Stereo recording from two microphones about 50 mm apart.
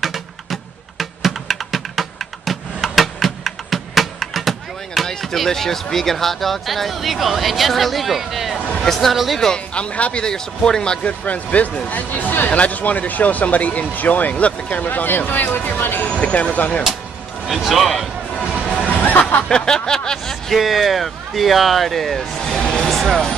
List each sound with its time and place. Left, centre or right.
0.0 s music: centre
8.7 s speech: centre
9.8 s speech: left
10.2 s speech: centre; by 16.1 s left
16.1 s speech: left
17.5 s speech: centre
18.9 s music: left
19.4 s speech: centre
20.5 s speech: centre
22.8 s vehicle: centre